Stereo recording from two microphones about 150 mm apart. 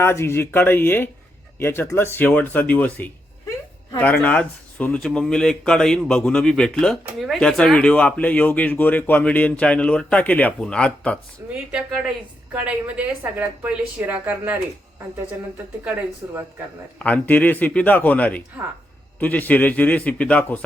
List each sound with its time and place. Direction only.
0.0 s speech: 15° left (ahead or behind)
11.4 s a woman's voice: 15° right (ahead or behind)
16.2 s speech: 20° right (ahead or behind)
17.0 s speech: 10° left (ahead or behind)